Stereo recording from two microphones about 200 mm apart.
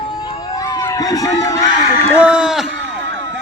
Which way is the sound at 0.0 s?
20° left (ahead or behind).